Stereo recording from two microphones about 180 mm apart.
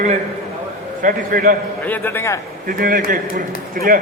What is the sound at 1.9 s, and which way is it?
Speech, 10° left (ahead or behind).